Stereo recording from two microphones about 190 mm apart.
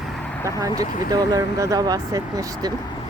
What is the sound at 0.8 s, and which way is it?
Speech, 20° right (ahead or behind).